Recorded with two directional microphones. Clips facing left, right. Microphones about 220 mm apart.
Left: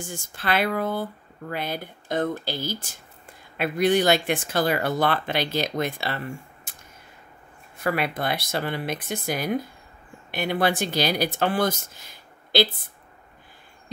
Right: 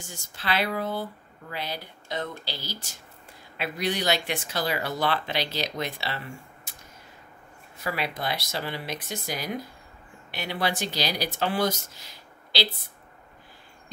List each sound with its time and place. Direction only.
0.0 s speech: 50° left (ahead or behind)
7.8 s speech: 55° left (ahead or behind)